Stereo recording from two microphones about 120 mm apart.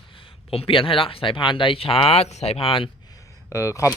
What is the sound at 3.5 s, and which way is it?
Speech, 25° left (ahead or behind).